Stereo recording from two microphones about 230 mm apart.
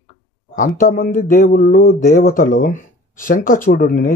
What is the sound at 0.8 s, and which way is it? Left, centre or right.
Speech, left.